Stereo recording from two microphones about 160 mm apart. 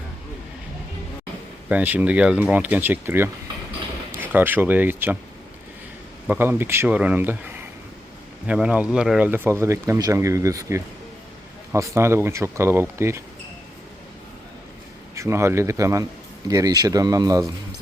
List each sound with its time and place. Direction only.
1.7 s speech: 10° right (ahead or behind)
6.2 s speech: 10° right (ahead or behind)
15.1 s speech: 20° right (ahead or behind)